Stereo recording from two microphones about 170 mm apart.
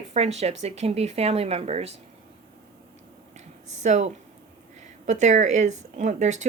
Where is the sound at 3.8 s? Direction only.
40° right (ahead or behind).